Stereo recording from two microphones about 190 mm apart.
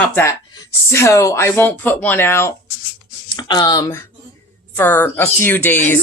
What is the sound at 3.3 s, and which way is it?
Speech, 25° left (ahead or behind).